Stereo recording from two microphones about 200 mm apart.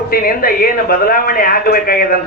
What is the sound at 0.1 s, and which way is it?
A man's voice, 45° left (ahead or behind).